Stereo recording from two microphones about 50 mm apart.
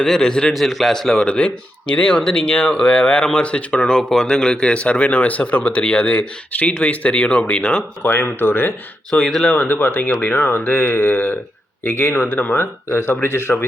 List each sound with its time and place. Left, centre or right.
0.0 s a man's voice: centre
0.5 s speech: centre
8.2 s speech: left
9.0 s a man's voice: centre
9.5 s speech: left